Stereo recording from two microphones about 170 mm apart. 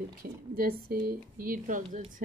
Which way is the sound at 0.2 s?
55° right (ahead or behind).